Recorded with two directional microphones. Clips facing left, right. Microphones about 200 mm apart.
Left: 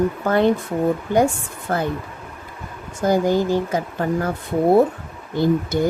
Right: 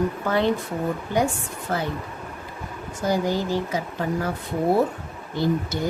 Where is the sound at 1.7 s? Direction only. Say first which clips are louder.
Left 4 dB; 55° left (ahead or behind).